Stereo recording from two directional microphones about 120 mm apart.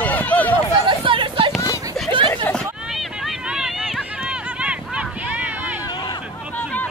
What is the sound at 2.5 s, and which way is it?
Hubbub, 15° left (ahead or behind).